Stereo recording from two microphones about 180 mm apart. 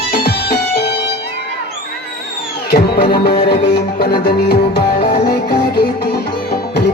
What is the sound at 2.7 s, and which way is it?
Music, 65° left (ahead or behind).